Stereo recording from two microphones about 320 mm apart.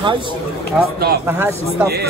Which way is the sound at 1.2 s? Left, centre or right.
Centre.